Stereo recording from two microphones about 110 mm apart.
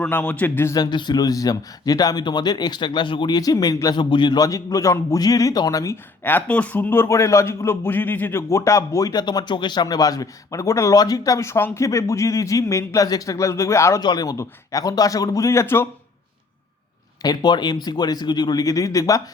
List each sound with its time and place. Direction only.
0.0 s a man's voice: 15° left (ahead or behind)
0.7 s speech: 40° left (ahead or behind)
6.2 s a man's voice: 15° left (ahead or behind)
14.0 s speech: 40° left (ahead or behind); by 15.9 s 20° left (ahead or behind)
17.2 s speech: 40° left (ahead or behind)